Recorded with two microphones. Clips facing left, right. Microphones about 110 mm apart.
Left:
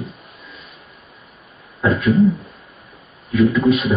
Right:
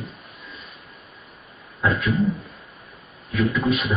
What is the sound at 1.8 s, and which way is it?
Speech, centre (ahead or behind).